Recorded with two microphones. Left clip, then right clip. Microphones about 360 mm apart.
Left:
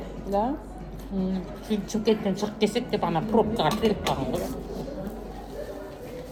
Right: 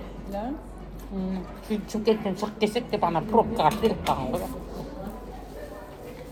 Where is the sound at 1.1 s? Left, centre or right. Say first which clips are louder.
Left 2 dB; centre.